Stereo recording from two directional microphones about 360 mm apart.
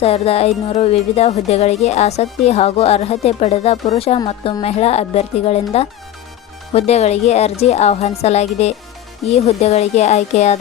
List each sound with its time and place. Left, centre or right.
0.0 s a woman's voice: centre